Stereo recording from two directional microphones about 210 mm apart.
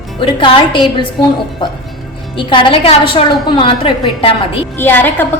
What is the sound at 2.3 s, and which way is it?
A woman's voice, 25° left (ahead or behind).